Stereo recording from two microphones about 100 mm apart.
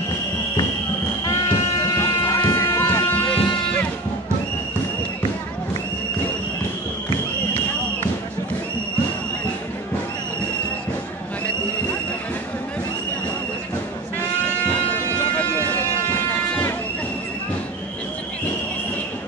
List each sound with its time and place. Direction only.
1.2 s music: 35° left (ahead or behind); by 3.8 s 15° left (ahead or behind)
15.3 s vehicle: 15° left (ahead or behind)